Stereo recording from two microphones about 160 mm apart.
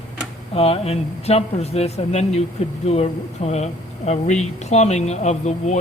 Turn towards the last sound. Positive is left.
turn(degrees=45)  # may be behind; listen again after turning